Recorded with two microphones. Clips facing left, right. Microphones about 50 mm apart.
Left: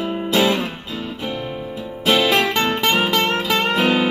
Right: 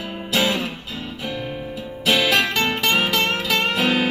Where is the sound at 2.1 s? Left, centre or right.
Left.